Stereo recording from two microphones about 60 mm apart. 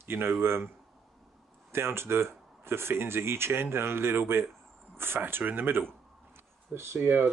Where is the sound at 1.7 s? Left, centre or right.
Right.